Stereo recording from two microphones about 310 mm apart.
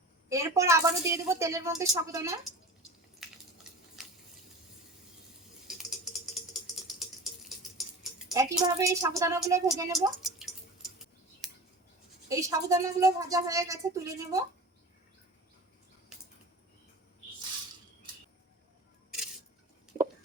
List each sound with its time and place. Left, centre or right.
0.3 s a woman's voice: centre
3.2 s a sound: centre
5.6 s a sound: centre
8.3 s a woman's voice: centre
10.2 s drip: centre
12.3 s a woman's voice: centre